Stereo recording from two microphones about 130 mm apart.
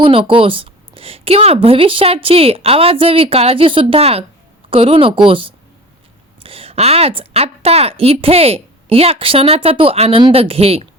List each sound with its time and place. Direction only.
0.0 s a woman's voice: 45° right (ahead or behind)